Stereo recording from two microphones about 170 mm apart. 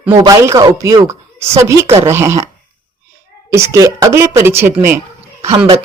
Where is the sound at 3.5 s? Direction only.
20° right (ahead or behind).